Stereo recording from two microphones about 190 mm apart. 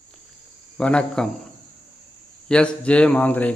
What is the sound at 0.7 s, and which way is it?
Cricket, 5° left (ahead or behind).